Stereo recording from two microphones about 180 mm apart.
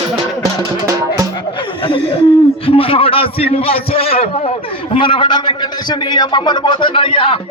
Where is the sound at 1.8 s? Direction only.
30° left (ahead or behind).